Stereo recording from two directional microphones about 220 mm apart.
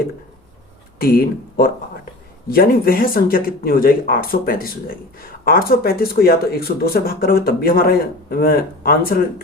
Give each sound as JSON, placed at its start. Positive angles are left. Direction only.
{"t": 0.9, "sound": "speech", "side_deg": 45}